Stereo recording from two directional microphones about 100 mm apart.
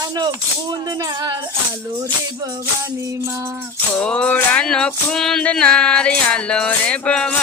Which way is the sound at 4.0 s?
10° left (ahead or behind).